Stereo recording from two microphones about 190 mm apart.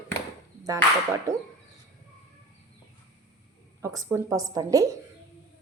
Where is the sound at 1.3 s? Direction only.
15° right (ahead or behind).